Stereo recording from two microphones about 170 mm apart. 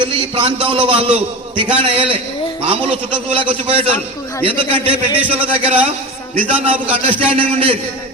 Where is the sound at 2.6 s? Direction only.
35° right (ahead or behind).